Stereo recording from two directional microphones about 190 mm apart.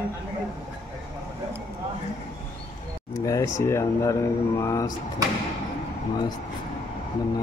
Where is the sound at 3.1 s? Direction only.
15° left (ahead or behind).